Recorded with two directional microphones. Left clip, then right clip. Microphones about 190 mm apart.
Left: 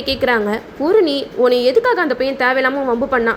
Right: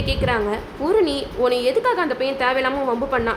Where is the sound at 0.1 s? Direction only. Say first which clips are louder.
Left 6 dB; 30° left (ahead or behind).